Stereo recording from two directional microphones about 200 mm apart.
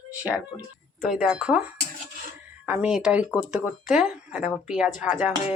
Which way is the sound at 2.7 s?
5° right (ahead or behind).